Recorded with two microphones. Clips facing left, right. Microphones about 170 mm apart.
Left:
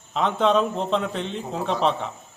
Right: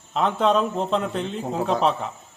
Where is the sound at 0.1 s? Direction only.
Centre (ahead or behind).